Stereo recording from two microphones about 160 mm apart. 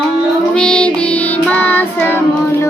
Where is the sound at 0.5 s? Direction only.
5° left (ahead or behind).